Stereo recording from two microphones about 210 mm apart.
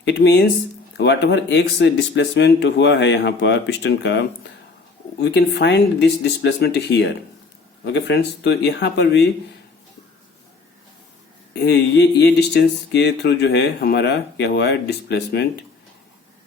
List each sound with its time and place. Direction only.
0.0 s speech: 55° left (ahead or behind)
5.2 s speech: 55° left (ahead or behind)
11.6 s speech: 55° left (ahead or behind)